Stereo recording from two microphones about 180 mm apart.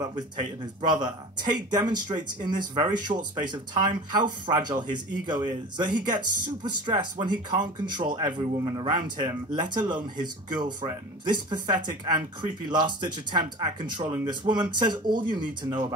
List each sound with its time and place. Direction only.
0.9 s speech: 25° right (ahead or behind)